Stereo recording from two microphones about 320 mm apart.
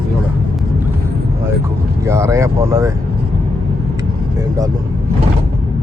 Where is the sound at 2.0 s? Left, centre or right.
Centre.